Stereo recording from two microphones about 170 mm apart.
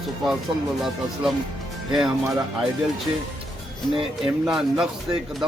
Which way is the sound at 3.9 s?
5° right (ahead or behind).